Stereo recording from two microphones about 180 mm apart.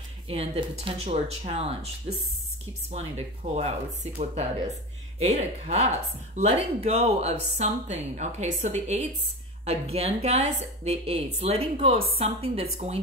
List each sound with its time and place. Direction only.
0.3 s speech: 35° right (ahead or behind)